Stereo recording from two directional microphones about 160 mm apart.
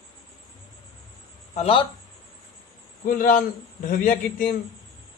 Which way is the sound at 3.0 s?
60° left (ahead or behind).